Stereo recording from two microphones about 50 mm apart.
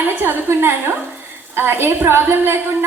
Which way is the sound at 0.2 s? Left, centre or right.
Right.